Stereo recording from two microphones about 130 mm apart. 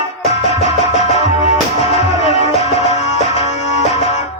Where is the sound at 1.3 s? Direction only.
45° left (ahead or behind).